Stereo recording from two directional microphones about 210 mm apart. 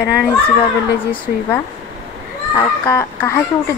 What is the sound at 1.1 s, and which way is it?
Speech, 5° left (ahead or behind).